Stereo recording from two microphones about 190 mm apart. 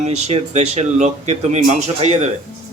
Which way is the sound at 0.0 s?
35° right (ahead or behind).